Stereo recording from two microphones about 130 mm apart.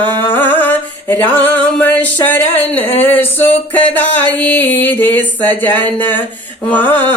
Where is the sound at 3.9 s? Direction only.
15° left (ahead or behind).